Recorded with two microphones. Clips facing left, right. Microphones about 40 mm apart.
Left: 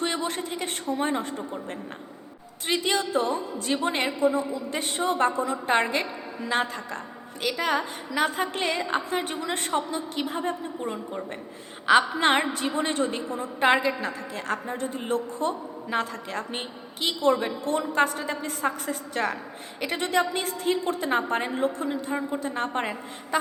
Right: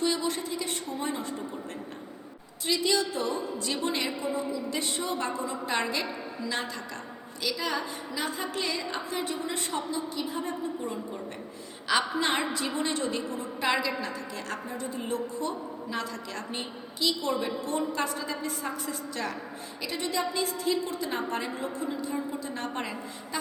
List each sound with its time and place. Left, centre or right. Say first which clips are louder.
0.0 s a woman's voice: even; left
2.6 s a woman's voice: left 1 dB; left